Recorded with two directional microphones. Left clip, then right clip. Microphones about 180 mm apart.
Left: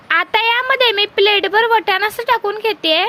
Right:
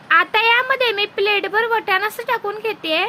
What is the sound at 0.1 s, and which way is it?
A woman's voice, 50° left (ahead or behind).